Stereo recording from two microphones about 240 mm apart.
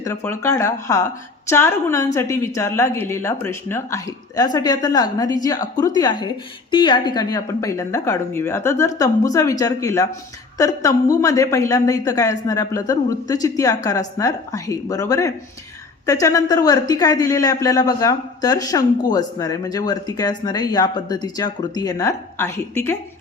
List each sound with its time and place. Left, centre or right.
0.0 s speech: centre